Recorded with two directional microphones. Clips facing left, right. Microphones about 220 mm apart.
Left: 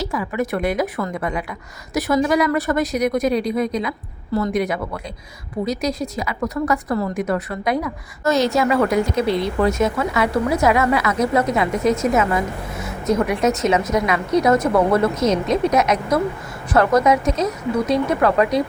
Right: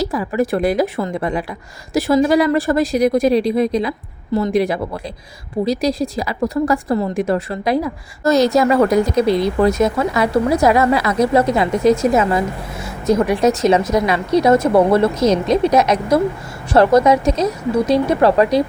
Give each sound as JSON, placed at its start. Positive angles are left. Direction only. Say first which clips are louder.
{"t": 0.0, "sound": "a woman's voice", "louder": "right 5 dB", "side_deg": -35}